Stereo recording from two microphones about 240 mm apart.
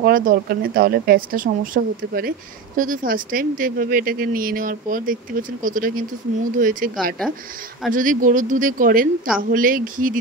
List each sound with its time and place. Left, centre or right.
0.0 s speech: right